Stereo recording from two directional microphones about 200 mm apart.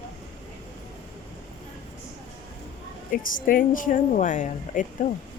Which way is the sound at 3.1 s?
45° left (ahead or behind).